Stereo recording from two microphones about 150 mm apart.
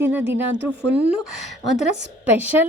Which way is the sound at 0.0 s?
15° right (ahead or behind).